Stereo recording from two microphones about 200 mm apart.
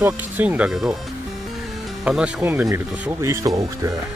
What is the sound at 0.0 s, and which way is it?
Speech, 10° right (ahead or behind).